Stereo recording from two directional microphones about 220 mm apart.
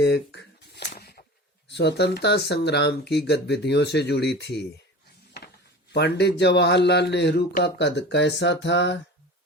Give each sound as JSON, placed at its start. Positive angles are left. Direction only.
{"t": 0.0, "sound": "a sound", "side_deg": 50}
{"t": 1.6, "sound": "a man's voice", "side_deg": 50}
{"t": 5.9, "sound": "a man's voice", "side_deg": 50}